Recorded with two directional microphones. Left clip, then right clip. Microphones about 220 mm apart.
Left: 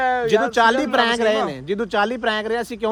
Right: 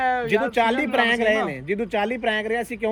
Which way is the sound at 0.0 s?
45° left (ahead or behind).